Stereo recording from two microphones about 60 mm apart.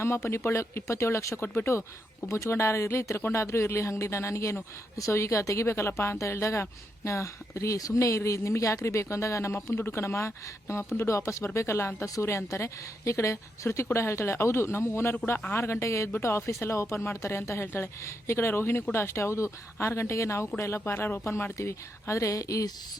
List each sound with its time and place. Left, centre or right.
0.0 s a woman's voice: left
2.2 s a woman's voice: left
9.9 s a woman's voice: left